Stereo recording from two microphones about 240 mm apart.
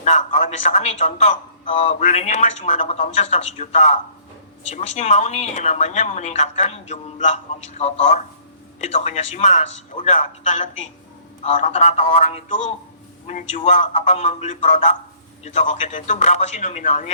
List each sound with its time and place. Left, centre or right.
0.0 s a man's voice: left